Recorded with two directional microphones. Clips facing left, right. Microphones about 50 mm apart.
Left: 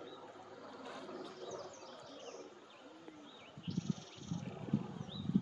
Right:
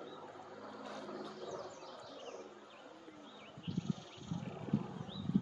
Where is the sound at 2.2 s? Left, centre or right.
Right.